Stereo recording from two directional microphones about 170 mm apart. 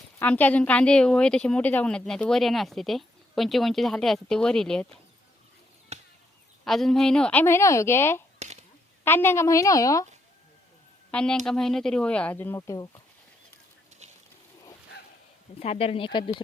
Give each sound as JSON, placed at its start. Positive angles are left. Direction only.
{"t": 0.2, "sound": "a woman's voice", "side_deg": 10}
{"t": 5.9, "sound": "chop", "side_deg": -40}
{"t": 6.7, "sound": "a woman's voice", "side_deg": 0}
{"t": 8.4, "sound": "a sound", "side_deg": -40}
{"t": 9.0, "sound": "a woman's voice", "side_deg": 15}
{"t": 11.1, "sound": "a woman's voice", "side_deg": 5}
{"t": 14.0, "sound": "boat", "side_deg": -40}
{"t": 15.5, "sound": "speech", "side_deg": 35}